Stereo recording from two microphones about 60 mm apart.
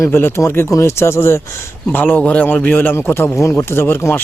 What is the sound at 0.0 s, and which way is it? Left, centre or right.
Speech, left.